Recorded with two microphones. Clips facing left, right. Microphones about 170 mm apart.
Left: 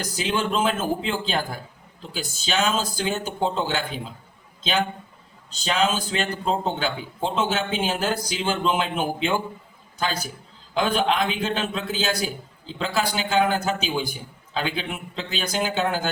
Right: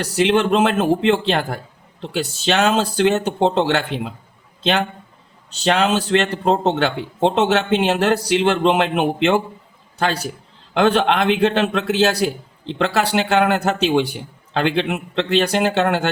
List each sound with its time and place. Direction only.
0.0 s a man's voice: 70° right (ahead or behind)